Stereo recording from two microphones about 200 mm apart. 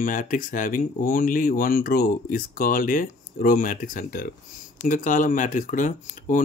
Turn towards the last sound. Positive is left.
turn(degrees=40)  # may be behind; listen again after turning